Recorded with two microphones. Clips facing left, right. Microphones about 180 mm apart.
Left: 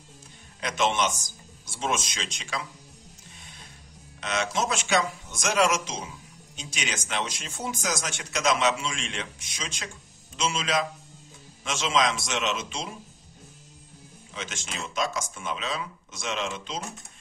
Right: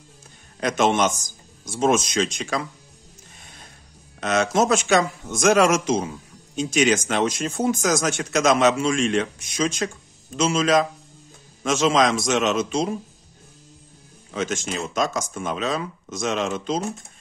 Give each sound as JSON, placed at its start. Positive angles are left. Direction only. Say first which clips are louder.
{"t": 0.6, "sound": "speech", "louder": "right 6 dB", "side_deg": -45}
{"t": 4.2, "sound": "speech", "louder": "right 8 dB", "side_deg": -45}
{"t": 14.3, "sound": "speech", "louder": "right 11 dB", "side_deg": -45}